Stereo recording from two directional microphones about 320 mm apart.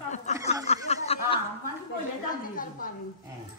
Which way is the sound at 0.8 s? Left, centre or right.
Centre.